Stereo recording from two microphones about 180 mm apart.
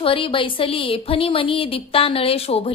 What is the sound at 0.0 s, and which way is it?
A woman's voice, 30° left (ahead or behind).